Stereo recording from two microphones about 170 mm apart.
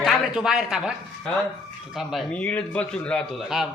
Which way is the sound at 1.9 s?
5° left (ahead or behind).